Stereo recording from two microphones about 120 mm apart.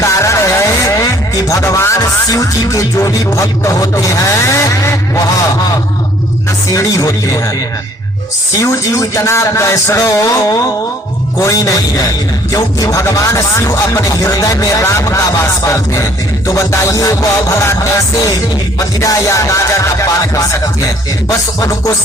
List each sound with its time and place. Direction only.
0.0 s music: 25° left (ahead or behind)
6.7 s a man's voice: 30° left (ahead or behind)
8.5 s a man's voice: 25° left (ahead or behind)